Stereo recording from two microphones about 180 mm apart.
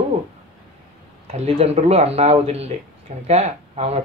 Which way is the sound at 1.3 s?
35° right (ahead or behind).